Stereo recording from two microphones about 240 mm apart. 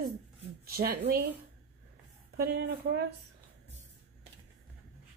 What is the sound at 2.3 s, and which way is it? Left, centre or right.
Speech, right.